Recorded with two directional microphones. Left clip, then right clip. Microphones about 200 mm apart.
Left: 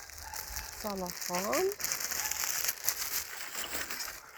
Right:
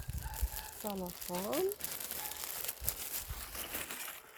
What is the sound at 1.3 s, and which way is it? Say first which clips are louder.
Crumpling: left 5 dB; centre (ahead or behind).